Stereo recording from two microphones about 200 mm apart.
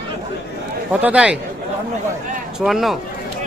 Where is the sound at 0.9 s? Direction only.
5° right (ahead or behind).